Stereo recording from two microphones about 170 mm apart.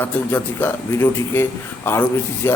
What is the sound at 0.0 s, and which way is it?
A man's voice, 10° left (ahead or behind).